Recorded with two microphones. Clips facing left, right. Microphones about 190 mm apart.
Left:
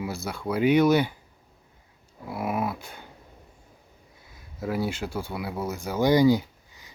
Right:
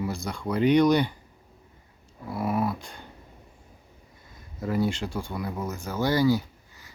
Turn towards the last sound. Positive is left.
turn(degrees=15)  # may be behind; listen again after turning